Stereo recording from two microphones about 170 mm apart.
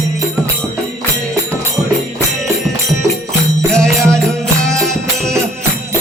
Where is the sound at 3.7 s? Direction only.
5° left (ahead or behind).